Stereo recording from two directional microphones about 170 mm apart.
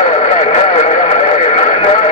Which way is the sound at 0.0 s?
40° left (ahead or behind).